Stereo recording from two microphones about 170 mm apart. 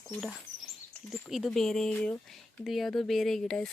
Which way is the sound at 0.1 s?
Centre (ahead or behind).